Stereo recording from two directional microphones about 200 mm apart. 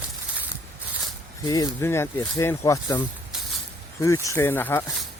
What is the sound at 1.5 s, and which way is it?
Speech, 20° left (ahead or behind).